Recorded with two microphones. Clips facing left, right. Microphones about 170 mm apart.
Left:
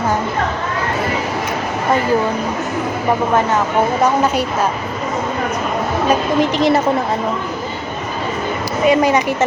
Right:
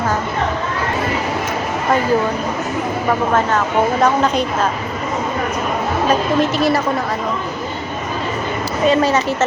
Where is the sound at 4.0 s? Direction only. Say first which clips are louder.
Even; 10° left (ahead or behind).